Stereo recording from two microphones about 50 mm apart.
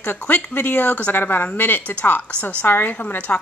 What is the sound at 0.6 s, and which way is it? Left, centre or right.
Speech, left.